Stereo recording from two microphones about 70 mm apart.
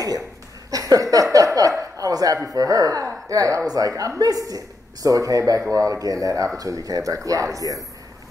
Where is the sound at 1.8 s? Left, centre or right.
Right.